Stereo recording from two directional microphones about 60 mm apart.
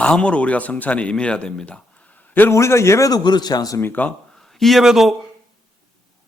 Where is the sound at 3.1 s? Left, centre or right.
Left.